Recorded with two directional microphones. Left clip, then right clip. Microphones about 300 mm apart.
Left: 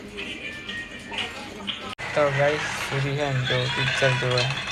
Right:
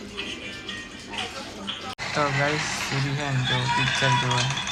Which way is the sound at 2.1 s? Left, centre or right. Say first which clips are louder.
Left 3 dB; centre.